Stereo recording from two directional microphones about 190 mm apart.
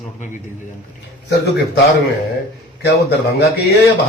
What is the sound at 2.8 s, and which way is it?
Speech, 60° left (ahead or behind).